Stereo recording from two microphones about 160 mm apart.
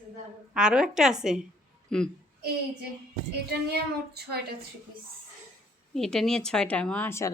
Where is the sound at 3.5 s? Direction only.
85° right.